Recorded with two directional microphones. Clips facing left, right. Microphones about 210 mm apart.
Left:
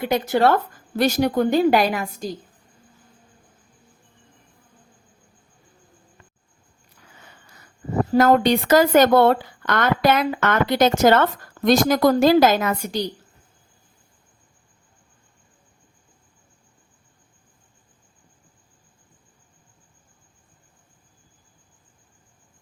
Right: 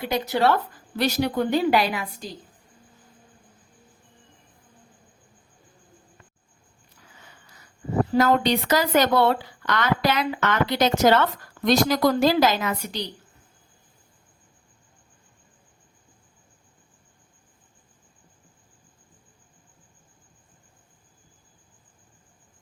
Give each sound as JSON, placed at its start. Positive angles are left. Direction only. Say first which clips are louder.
{"t": 0.0, "sound": "speech", "louder": "left 4 dB", "side_deg": 50}
{"t": 8.1, "sound": "speech", "louder": "left 5 dB", "side_deg": 45}